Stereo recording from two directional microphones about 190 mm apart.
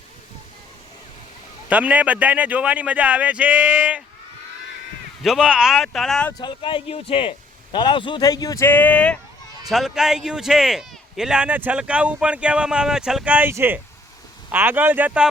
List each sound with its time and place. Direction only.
1.7 s speech: 10° right (ahead or behind)
5.2 s speech: centre (ahead or behind)
6.4 s a man's voice: 25° left (ahead or behind); by 15.3 s 5° right (ahead or behind)